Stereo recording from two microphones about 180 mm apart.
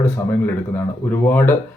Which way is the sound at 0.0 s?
10° left (ahead or behind).